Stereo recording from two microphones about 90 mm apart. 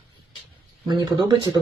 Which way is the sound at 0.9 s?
55° right (ahead or behind).